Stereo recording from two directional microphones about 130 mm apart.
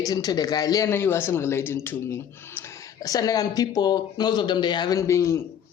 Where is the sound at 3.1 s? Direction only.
30° left (ahead or behind).